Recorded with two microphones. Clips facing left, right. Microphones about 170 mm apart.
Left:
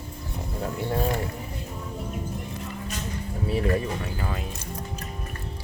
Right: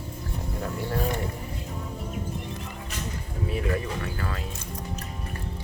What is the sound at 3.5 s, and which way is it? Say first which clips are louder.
Speech: left 4 dB; 25° left (ahead or behind).